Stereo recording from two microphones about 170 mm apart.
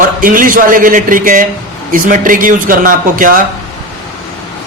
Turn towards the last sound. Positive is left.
turn(degrees=-55)  # may be behind; listen again after turning